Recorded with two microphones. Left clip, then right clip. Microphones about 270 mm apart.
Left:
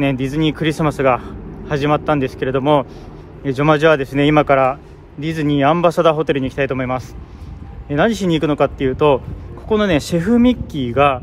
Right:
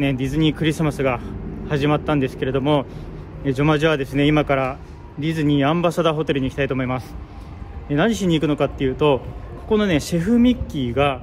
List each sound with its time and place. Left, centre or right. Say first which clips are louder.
0.0 s speech: left 3 dB; centre